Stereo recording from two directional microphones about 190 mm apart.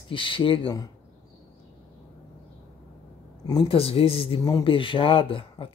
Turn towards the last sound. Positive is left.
turn(degrees=30)  # may be behind; listen again after turning